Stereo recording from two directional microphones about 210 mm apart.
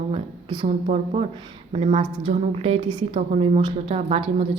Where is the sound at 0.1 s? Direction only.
25° right (ahead or behind).